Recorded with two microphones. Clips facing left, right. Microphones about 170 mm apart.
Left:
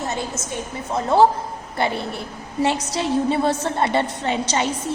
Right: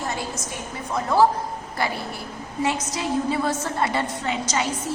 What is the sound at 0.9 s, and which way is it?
Speech, 25° left (ahead or behind).